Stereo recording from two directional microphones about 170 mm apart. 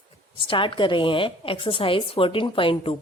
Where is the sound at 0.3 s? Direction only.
30° left (ahead or behind).